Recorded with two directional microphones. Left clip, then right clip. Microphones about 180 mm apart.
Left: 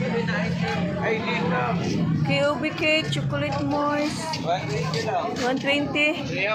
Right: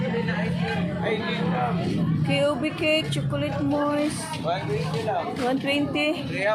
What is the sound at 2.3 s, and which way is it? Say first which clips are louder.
Speech: even; 15° right (ahead or behind).